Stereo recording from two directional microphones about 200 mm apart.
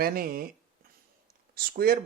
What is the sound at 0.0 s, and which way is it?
Speech, 50° right (ahead or behind).